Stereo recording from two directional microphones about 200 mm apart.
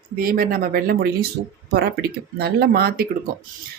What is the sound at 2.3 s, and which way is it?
Speech, 55° right (ahead or behind).